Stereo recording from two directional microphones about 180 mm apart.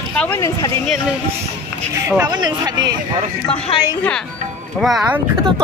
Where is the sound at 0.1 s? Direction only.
5° left (ahead or behind).